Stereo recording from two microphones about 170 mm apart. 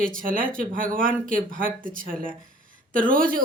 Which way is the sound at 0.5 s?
55° right (ahead or behind).